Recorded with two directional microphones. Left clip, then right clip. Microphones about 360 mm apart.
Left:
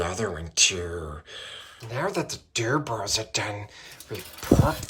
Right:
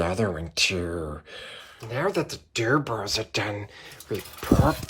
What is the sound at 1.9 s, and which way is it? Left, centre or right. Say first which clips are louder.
Speech: right 2 dB; centre.